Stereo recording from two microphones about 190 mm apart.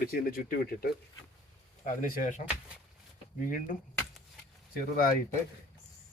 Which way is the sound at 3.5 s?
45° left (ahead or behind).